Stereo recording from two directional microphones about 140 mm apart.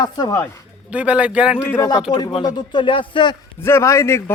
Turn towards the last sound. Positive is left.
turn(degrees=20)  # may be behind; listen again after turning